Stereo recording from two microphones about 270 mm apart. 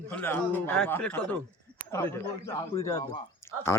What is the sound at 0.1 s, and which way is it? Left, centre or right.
Speech, centre.